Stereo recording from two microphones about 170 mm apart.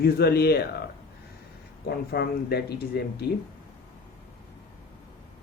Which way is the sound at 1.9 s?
65° left (ahead or behind).